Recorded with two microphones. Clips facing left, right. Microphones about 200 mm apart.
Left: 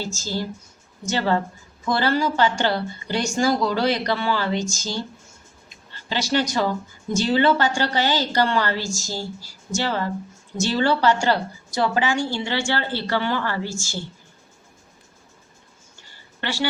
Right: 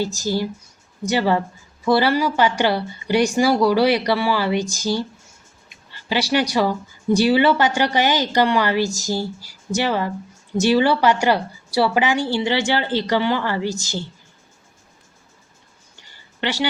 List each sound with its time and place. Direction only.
0.0 s a woman's voice: 15° right (ahead or behind)
16.4 s speech: 20° right (ahead or behind)